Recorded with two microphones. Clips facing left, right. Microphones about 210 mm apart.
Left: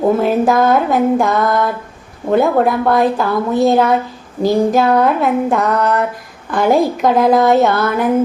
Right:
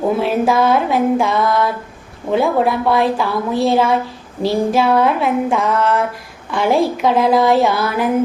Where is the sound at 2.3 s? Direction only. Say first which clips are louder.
Left 3 dB; centre (ahead or behind).